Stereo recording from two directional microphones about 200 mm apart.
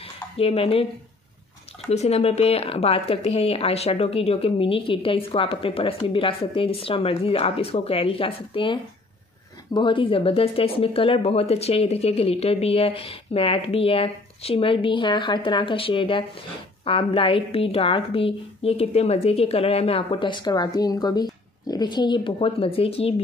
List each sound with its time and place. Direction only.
0.0 s dishes: 30° left (ahead or behind)
1.9 s speech: 30° left (ahead or behind)
9.8 s speech: 25° left (ahead or behind)